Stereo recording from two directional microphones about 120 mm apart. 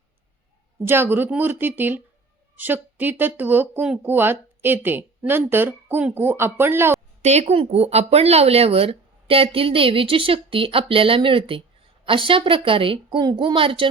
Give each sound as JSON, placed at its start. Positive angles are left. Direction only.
{"t": 0.8, "sound": "speech", "side_deg": -15}
{"t": 7.2, "sound": "speech", "side_deg": -65}